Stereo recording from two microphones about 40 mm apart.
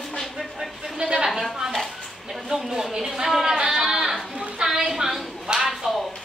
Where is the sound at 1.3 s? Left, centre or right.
Centre.